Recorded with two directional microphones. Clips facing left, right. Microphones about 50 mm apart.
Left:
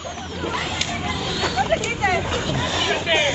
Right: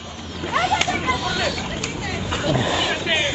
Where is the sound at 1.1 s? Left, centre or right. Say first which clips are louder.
Right 3 dB; centre.